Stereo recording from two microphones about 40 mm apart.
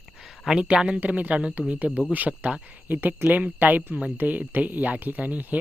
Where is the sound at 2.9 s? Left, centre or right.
Right.